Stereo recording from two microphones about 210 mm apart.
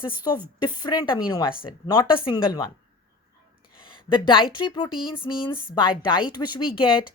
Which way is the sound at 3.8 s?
25° left (ahead or behind).